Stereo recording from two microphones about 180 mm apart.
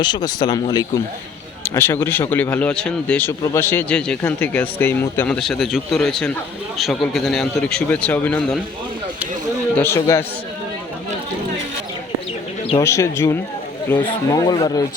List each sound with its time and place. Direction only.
0.0 s speech: 25° left (ahead or behind); by 8.5 s 5° left (ahead or behind)
9.7 s speech: 15° left (ahead or behind)
12.8 s speech: 15° left (ahead or behind)